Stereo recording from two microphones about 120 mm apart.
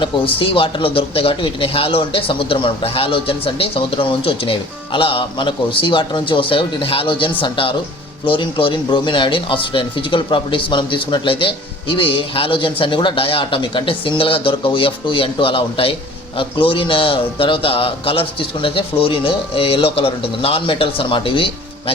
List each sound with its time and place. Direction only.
0.0 s speech: 45° left (ahead or behind)